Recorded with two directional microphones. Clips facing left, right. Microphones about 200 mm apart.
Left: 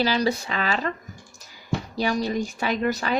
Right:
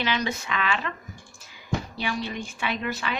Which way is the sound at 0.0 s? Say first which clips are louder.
Left 5 dB; 35° left (ahead or behind).